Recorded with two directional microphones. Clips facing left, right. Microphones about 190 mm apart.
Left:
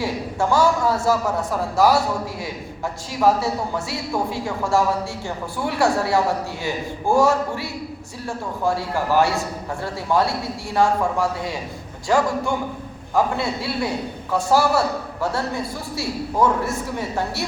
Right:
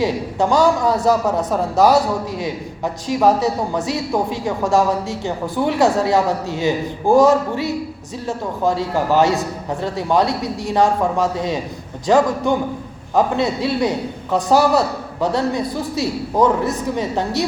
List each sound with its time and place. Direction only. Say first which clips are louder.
0.0 s speech: right 5 dB; 20° right (ahead or behind)